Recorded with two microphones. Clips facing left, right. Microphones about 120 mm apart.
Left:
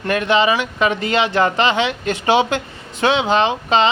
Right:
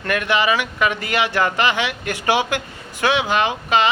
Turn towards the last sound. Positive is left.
turn(degrees=25)  # may be behind; listen again after turning